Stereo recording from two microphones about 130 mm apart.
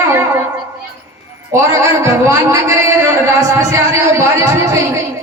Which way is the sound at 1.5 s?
25° right (ahead or behind).